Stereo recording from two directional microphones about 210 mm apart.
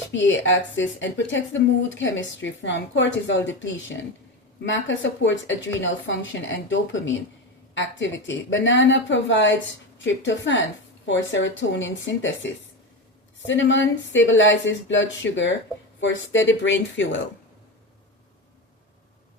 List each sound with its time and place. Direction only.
0.1 s speech: 60° left (ahead or behind)